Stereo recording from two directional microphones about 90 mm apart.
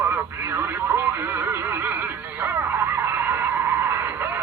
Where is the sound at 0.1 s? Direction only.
25° right (ahead or behind).